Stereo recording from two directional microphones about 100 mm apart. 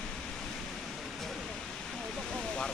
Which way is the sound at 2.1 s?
5° left (ahead or behind).